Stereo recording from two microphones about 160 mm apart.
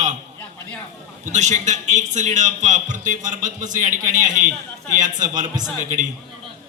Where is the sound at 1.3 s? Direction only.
50° right (ahead or behind).